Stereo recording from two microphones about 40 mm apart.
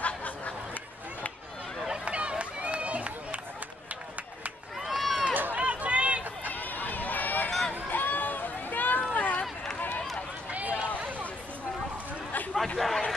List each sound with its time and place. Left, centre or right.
1.9 s run: right
4.8 s run: centre
5.3 s run: right
5.6 s run: right
6.5 s run: left
10.5 s run: right
12.7 s a sound: centre